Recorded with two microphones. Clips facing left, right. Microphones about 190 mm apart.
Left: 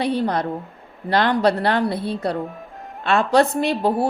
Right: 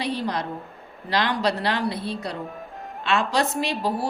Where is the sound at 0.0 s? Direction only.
55° left (ahead or behind).